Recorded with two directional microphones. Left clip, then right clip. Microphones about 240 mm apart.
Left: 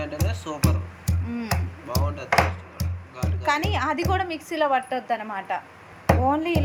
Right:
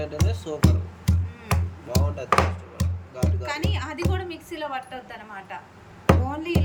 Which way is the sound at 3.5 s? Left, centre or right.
Centre.